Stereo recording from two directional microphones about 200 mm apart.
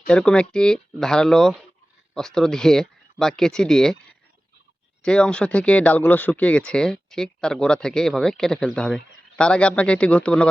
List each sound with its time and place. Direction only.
0.1 s speech: 5° left (ahead or behind)
5.0 s speech: 5° left (ahead or behind)